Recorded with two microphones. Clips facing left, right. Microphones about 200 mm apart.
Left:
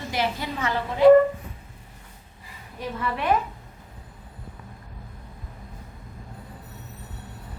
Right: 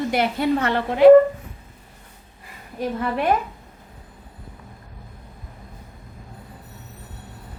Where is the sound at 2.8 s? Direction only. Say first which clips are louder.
Right 5 dB; 45° right (ahead or behind).